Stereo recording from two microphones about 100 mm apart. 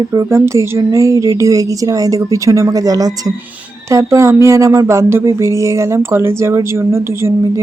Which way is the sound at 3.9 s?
30° right (ahead or behind).